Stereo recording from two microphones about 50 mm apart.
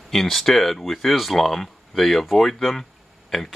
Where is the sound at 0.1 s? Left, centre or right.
Centre.